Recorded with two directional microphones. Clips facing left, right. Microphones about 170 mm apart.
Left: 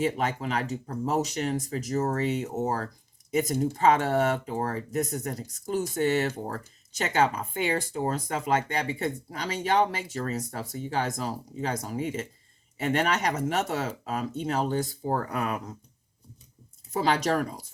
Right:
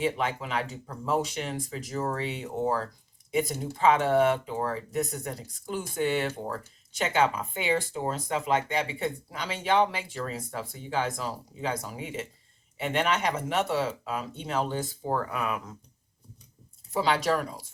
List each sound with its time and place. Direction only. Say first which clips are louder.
0.0 s speech: left 1 dB; 40° left (ahead or behind)
17.0 s speech: left 1 dB; 45° left (ahead or behind)